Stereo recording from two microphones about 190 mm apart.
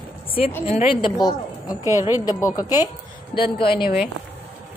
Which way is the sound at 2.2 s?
20° left (ahead or behind).